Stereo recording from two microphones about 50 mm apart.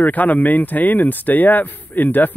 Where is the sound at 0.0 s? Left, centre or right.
Left.